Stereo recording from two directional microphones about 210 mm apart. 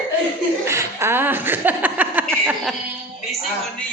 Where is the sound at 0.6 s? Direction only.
10° right (ahead or behind).